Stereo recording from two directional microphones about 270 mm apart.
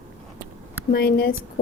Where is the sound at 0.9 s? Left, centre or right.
Left.